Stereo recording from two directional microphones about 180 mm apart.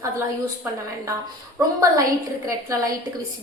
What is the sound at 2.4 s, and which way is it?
Speech, 20° right (ahead or behind).